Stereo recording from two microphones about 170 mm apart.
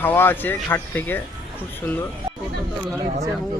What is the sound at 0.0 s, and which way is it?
Speech, 10° left (ahead or behind).